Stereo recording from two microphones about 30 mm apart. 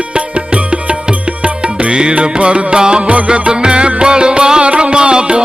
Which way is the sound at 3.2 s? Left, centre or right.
Right.